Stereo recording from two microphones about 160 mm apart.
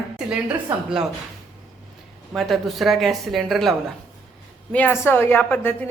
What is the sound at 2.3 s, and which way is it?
Speech, centre (ahead or behind).